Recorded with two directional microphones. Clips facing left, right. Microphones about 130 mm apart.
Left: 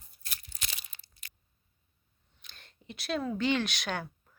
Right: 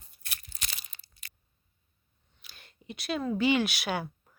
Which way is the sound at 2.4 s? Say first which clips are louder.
Right 3 dB; 5° right (ahead or behind).